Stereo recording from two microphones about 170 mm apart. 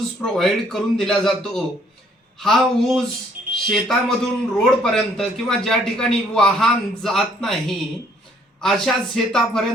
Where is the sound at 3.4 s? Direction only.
55° right (ahead or behind).